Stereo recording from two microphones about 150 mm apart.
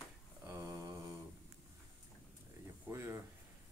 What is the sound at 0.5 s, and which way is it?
Mantra, 25° right (ahead or behind).